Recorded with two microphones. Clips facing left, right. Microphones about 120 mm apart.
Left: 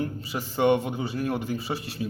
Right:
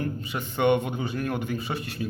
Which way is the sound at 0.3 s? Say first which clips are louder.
Left 1 dB; 35° left (ahead or behind).